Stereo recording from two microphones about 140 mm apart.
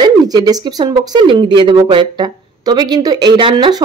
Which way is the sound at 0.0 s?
30° right (ahead or behind).